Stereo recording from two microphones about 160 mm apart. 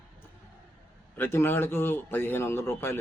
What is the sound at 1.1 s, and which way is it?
A man's voice, 15° left (ahead or behind).